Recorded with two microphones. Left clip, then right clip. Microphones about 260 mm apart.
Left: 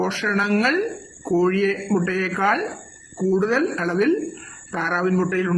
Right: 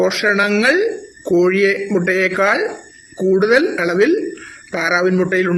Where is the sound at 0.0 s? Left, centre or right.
Centre.